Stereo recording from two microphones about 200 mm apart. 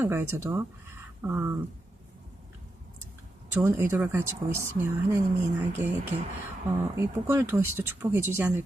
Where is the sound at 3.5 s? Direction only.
15° right (ahead or behind).